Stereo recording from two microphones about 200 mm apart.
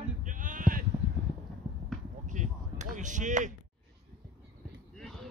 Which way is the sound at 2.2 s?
35° right (ahead or behind).